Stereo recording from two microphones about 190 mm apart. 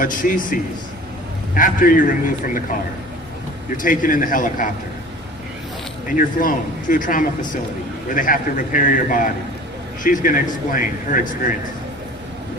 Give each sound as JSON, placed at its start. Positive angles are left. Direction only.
{"t": 0.0, "sound": "a man's voice", "side_deg": 45}
{"t": 3.8, "sound": "a man's voice", "side_deg": 45}
{"t": 6.1, "sound": "a man's voice", "side_deg": 45}